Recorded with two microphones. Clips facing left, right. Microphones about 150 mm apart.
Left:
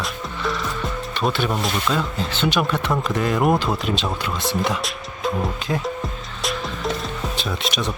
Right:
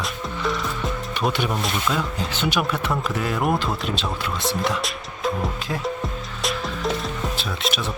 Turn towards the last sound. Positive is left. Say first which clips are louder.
# left 1 dB
turn(degrees=-5)  # may be behind; listen again after turning